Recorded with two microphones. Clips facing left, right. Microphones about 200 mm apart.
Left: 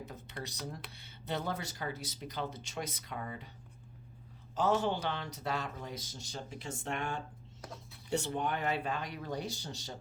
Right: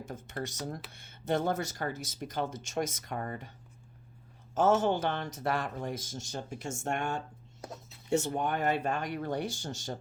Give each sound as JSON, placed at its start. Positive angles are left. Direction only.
{"t": 0.0, "sound": "speech", "side_deg": -45}
{"t": 4.5, "sound": "speech", "side_deg": -45}
{"t": 7.6, "sound": "speech", "side_deg": -25}
{"t": 8.1, "sound": "speech", "side_deg": -45}